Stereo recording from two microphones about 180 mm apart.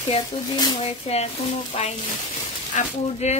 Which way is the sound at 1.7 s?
35° left (ahead or behind).